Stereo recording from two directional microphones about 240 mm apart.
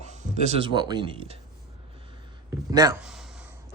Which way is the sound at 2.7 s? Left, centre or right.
Centre.